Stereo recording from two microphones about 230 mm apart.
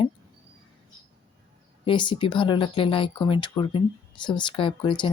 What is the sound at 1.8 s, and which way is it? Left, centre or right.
Speech, left.